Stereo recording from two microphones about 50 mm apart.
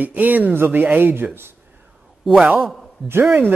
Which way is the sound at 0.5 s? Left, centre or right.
Right.